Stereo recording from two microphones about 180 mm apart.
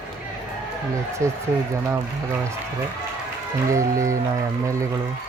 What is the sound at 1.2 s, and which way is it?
Cattle, 15° right (ahead or behind).